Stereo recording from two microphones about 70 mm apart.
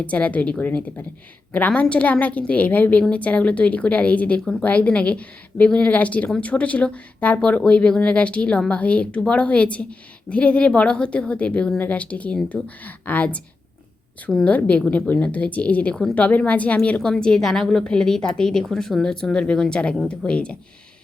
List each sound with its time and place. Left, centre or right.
0.0 s a woman's voice: centre
14.4 s a woman's voice: centre